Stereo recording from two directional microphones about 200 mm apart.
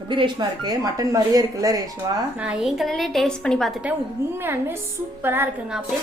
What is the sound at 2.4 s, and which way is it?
A woman's voice, 5° right (ahead or behind).